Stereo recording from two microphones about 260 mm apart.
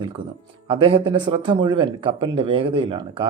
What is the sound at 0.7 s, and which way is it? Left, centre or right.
Speech, centre.